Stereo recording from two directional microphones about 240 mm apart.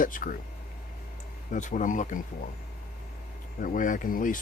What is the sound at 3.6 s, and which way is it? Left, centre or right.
Speech, left.